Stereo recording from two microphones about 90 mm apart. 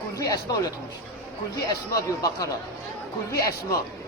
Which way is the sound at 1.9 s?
40° left (ahead or behind).